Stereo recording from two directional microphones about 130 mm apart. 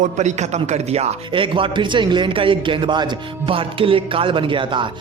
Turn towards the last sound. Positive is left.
turn(degrees=-40)  # may be behind; listen again after turning